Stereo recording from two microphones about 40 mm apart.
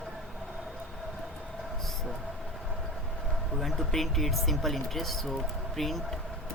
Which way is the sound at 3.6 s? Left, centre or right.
Centre.